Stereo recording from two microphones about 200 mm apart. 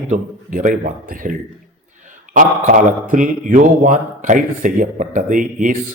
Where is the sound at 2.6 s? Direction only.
40° right (ahead or behind).